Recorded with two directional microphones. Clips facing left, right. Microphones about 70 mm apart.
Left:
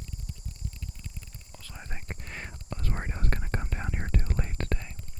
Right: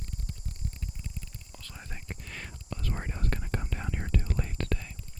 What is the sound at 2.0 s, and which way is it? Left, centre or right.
Whispering, left.